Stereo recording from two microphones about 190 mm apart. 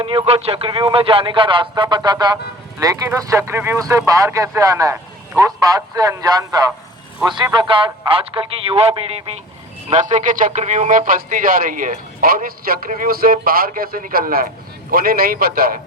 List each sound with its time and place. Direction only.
0.0 s a man's voice: 30° right (ahead or behind); by 15.8 s 50° right (ahead or behind)